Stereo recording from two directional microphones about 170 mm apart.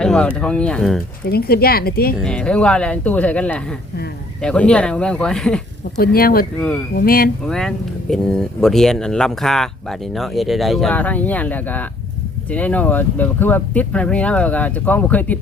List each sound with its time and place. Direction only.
0.0 s a sound: 5° left (ahead or behind)
0.3 s speech: 5° left (ahead or behind)
1.2 s speech: 65° left (ahead or behind)
2.2 s speech: 5° left (ahead or behind)
6.0 s speech: 60° left (ahead or behind)
6.6 s speech: 5° left (ahead or behind)
6.9 s speech: 60° left (ahead or behind)
7.4 s speech: 5° left (ahead or behind)